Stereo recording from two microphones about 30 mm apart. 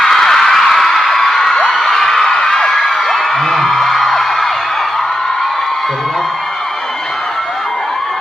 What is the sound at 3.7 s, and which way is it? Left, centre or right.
Music, centre.